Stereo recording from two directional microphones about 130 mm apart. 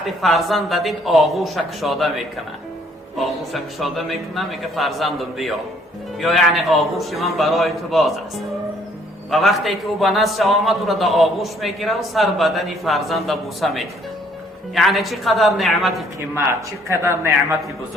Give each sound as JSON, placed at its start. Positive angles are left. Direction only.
{"t": 0.0, "sound": "a man's voice", "side_deg": 0}
{"t": 16.9, "sound": "a man's voice", "side_deg": -20}